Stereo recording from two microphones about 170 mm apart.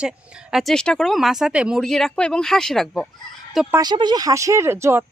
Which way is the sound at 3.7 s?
25° right (ahead or behind).